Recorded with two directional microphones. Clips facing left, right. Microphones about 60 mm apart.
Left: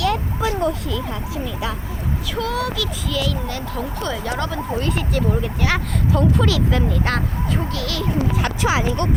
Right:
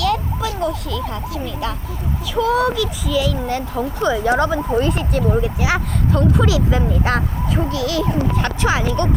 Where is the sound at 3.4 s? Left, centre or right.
Right.